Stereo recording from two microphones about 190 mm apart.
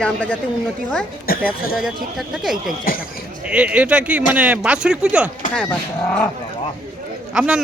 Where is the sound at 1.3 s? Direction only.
50° left (ahead or behind).